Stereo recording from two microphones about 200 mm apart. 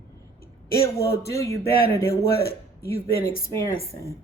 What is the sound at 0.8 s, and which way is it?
Speech, 15° left (ahead or behind).